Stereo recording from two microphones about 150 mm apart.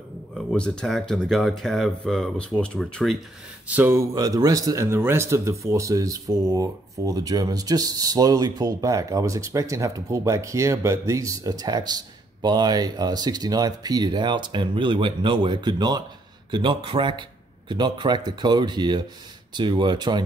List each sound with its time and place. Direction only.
0.3 s speech: 5° left (ahead or behind)
3.6 s a man's voice: 10° right (ahead or behind); by 20.2 s 30° right (ahead or behind)